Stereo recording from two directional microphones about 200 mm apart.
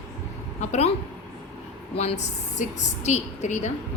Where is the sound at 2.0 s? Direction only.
35° left (ahead or behind).